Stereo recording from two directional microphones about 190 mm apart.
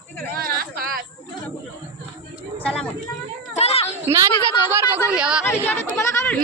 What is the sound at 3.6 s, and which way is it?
Children playing, 30° left (ahead or behind).